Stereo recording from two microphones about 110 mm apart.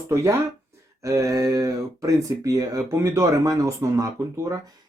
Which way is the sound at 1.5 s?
30° right (ahead or behind).